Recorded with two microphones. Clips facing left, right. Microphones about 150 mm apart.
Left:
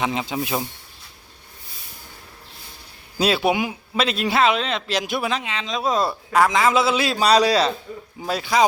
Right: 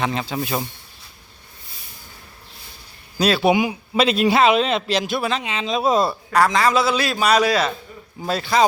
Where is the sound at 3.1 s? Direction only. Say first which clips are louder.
Right 1 dB; 25° left (ahead or behind).